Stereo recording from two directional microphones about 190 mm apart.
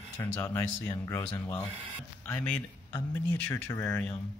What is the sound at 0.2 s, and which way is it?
Speech, 15° left (ahead or behind).